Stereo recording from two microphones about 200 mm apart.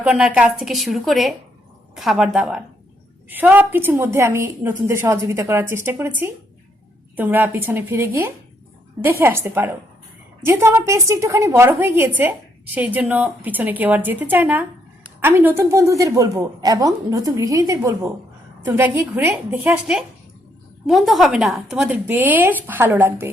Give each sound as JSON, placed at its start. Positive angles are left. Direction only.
{"t": 0.0, "sound": "a woman's voice", "side_deg": -5}